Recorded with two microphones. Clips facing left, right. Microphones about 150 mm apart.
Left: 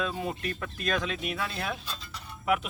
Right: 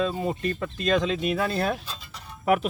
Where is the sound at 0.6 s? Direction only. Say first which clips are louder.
Right 7 dB; 25° right (ahead or behind).